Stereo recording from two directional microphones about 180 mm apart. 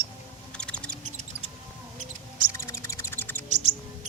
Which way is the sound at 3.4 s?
40° right (ahead or behind).